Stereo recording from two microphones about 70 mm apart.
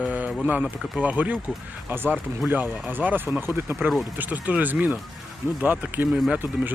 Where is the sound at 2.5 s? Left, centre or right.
Right.